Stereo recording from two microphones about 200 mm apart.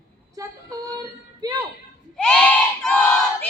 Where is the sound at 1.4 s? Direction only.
15° right (ahead or behind).